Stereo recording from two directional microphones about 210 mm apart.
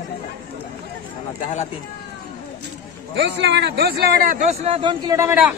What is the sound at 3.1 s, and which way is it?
A man's voice, 55° right (ahead or behind).